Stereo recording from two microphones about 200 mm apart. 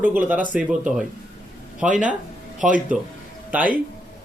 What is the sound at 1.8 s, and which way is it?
A man's voice, 5° right (ahead or behind).